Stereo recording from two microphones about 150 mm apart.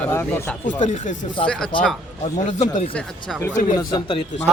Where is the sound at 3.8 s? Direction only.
25° left (ahead or behind).